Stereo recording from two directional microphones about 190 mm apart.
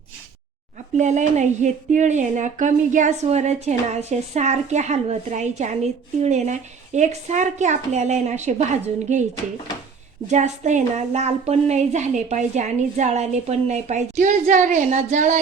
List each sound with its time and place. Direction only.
0.9 s a woman's voice: 40° right (ahead or behind)
10.2 s a woman's voice: 35° right (ahead or behind)